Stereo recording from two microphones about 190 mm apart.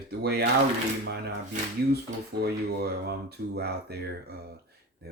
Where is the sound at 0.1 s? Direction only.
60° right (ahead or behind).